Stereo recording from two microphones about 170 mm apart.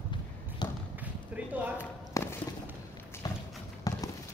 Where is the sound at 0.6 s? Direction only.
25° left (ahead or behind).